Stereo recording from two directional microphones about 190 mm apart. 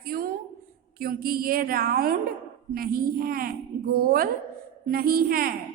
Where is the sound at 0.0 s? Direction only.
50° right (ahead or behind).